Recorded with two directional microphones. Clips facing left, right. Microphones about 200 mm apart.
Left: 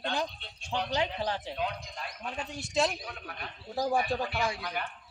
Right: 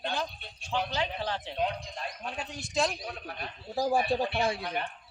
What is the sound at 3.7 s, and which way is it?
Speech, 5° right (ahead or behind).